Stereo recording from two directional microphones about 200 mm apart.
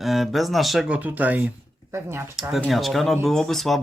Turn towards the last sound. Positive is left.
turn(degrees=0)  # may be behind; listen again after turning